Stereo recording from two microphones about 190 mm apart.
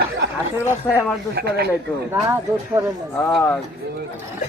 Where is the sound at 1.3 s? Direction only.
55° right (ahead or behind).